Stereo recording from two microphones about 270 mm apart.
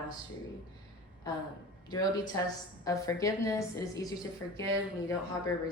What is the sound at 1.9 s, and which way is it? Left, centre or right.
A woman's voice, centre.